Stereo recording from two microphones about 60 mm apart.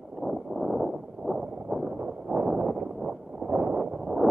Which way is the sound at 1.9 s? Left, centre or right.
Right.